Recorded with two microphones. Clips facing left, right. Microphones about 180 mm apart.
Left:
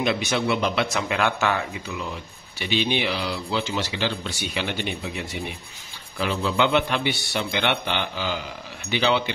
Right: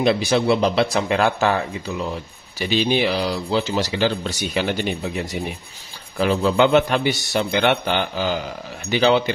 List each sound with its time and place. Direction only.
0.0 s a man's voice: 35° right (ahead or behind)